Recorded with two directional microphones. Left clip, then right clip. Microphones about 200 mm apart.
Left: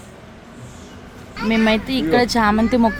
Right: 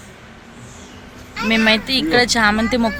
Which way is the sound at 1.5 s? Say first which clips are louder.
Right 3 dB; 15° left (ahead or behind).